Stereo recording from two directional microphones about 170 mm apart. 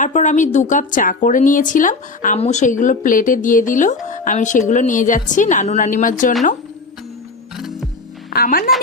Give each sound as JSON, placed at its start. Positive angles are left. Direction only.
{"t": 0.0, "sound": "a woman's voice", "side_deg": 45}
{"t": 7.5, "sound": "music", "side_deg": 0}
{"t": 8.3, "sound": "speech", "side_deg": 65}